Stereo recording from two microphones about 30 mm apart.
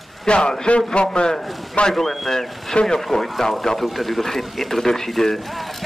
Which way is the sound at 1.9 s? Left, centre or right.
Centre.